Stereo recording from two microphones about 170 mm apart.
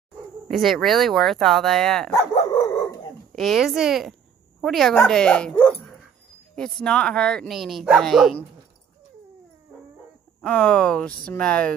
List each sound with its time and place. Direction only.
0.5 s speech: centre (ahead or behind)
2.5 s dog: 20° left (ahead or behind)
3.3 s a woman's voice: centre (ahead or behind)
10.4 s speech: 10° left (ahead or behind)